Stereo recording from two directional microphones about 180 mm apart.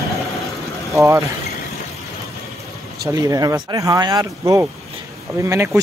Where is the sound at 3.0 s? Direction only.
20° right (ahead or behind).